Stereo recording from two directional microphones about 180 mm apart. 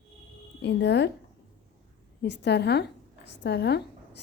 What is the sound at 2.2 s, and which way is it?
A woman's voice, 70° left (ahead or behind).